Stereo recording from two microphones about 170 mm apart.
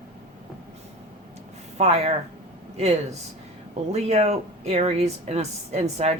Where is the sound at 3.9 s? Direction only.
40° right (ahead or behind).